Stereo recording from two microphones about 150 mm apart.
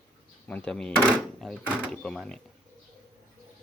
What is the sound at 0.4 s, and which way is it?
Speech, 10° left (ahead or behind).